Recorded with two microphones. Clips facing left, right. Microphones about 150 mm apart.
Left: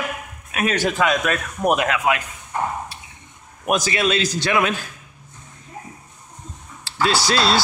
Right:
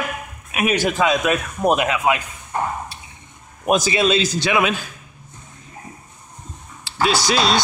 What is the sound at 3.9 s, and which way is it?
Speech, 25° right (ahead or behind).